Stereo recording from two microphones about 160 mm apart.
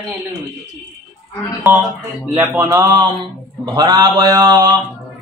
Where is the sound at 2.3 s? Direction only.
20° right (ahead or behind).